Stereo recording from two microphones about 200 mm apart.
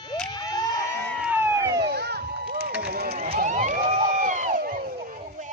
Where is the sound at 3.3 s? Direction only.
35° right (ahead or behind).